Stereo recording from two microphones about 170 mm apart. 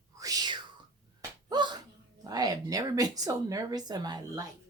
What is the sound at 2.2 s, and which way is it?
A woman's voice, 20° right (ahead or behind).